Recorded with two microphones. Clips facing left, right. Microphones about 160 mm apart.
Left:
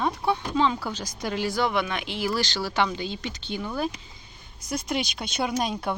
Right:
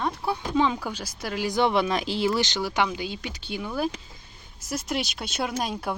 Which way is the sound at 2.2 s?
20° right (ahead or behind).